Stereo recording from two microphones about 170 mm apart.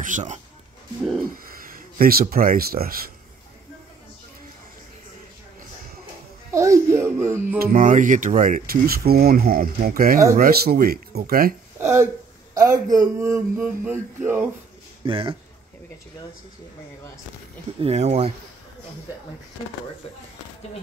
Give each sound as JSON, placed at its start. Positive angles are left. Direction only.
{"t": 0.0, "sound": "speech", "side_deg": -45}
{"t": 1.5, "sound": "speech", "side_deg": -60}
{"t": 6.5, "sound": "music", "side_deg": -15}
{"t": 7.5, "sound": "speech", "side_deg": -60}
{"t": 11.8, "sound": "a sound", "side_deg": -15}
{"t": 12.5, "sound": "speech", "side_deg": -20}
{"t": 13.6, "sound": "a sound", "side_deg": -10}
{"t": 15.0, "sound": "speech", "side_deg": -30}
{"t": 17.7, "sound": "speech", "side_deg": -35}